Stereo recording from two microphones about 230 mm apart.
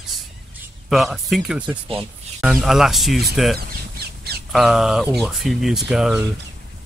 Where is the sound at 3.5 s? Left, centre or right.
Right.